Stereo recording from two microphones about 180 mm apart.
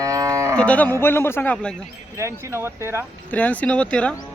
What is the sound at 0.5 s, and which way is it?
A man's voice, 5° left (ahead or behind).